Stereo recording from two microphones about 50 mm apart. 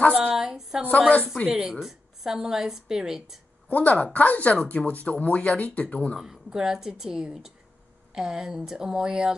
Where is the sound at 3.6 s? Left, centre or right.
Left.